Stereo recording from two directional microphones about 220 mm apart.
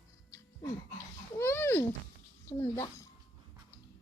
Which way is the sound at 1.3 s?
10° left (ahead or behind).